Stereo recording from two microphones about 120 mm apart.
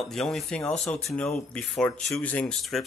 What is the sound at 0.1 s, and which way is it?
Speech, 5° left (ahead or behind).